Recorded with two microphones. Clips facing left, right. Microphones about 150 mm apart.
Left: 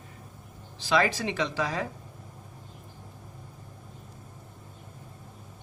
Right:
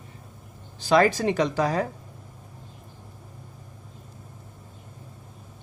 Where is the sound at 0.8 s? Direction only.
45° right (ahead or behind).